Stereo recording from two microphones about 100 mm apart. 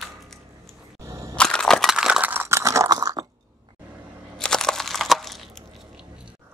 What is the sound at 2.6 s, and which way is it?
Chewing, 30° right (ahead or behind).